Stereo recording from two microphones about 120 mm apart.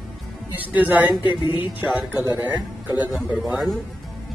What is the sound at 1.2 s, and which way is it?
Speech, 40° left (ahead or behind).